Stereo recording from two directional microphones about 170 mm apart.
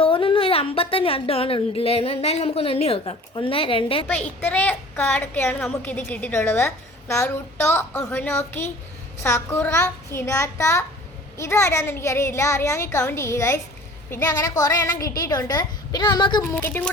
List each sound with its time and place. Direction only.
0.0 s a woman's voice: 30° left (ahead or behind)
4.4 s a woman's voice: 10° left (ahead or behind); by 16.4 s 25° left (ahead or behind)
16.4 s a woman's voice: 15° left (ahead or behind)